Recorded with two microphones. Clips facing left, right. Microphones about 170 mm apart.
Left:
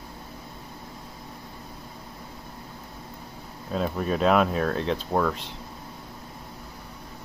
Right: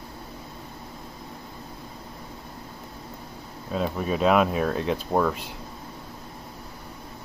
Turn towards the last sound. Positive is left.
turn(degrees=-10)  # may be behind; listen again after turning